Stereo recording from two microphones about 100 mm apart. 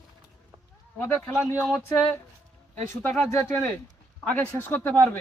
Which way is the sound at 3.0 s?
15° left (ahead or behind).